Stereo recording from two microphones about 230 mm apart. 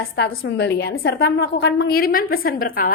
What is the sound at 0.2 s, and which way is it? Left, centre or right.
A woman's voice, left.